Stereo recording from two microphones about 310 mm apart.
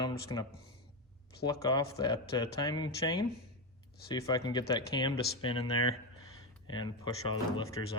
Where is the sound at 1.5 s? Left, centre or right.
Centre.